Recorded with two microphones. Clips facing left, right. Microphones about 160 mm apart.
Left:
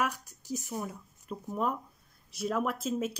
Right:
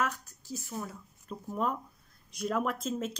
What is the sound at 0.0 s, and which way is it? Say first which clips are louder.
A woman's voice: left 1 dB; 15° left (ahead or behind).